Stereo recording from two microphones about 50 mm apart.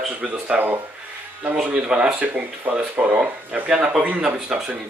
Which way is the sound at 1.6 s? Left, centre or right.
Right.